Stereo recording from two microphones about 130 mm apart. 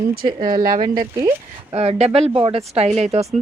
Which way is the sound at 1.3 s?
50° right (ahead or behind).